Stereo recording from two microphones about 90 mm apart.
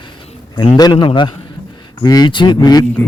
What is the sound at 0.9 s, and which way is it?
Speech, 65° left (ahead or behind).